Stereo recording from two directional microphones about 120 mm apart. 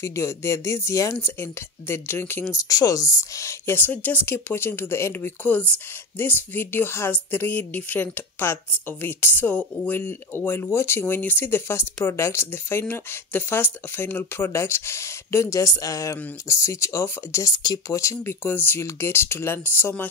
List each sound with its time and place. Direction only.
0.0 s speech: 25° left (ahead or behind)